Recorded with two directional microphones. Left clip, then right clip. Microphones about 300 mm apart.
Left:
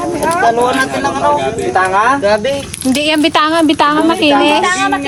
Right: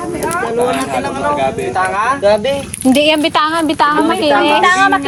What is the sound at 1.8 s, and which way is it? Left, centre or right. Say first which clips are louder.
Speech: left 4 dB; left.